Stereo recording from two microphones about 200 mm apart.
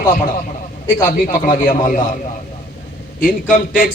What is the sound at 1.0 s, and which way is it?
A man's voice, 45° left (ahead or behind).